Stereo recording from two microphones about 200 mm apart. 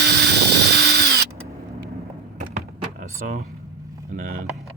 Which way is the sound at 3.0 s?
40° right (ahead or behind).